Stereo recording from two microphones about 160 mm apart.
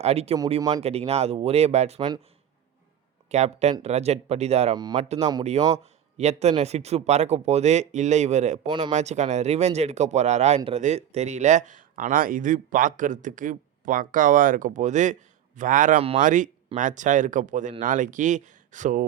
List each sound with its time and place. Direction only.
0.0 s speech: 40° right (ahead or behind)
2.0 s speech: 25° right (ahead or behind)
3.2 s speech: 45° right (ahead or behind)
8.6 s speech: 25° right (ahead or behind)
8.9 s speech: 45° right (ahead or behind)